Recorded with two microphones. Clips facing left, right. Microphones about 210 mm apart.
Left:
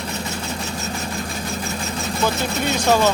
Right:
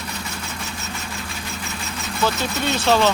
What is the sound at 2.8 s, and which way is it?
Speech, 10° left (ahead or behind).